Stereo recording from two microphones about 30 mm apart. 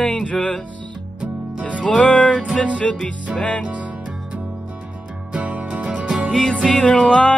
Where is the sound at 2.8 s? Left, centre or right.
Centre.